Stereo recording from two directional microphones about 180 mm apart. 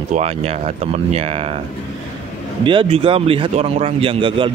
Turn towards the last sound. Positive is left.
turn(degrees=-30)  # may be behind; listen again after turning